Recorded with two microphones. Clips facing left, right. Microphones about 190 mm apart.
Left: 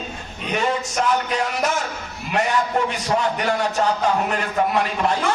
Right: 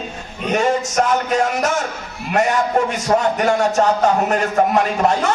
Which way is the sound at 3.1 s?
45° right (ahead or behind).